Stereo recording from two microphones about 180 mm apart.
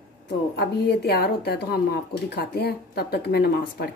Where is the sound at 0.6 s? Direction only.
65° left (ahead or behind).